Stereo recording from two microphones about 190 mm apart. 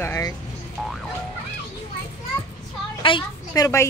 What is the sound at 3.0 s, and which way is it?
Speech, 25° left (ahead or behind).